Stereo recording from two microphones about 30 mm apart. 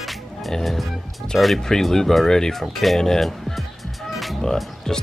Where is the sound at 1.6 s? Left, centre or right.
Centre.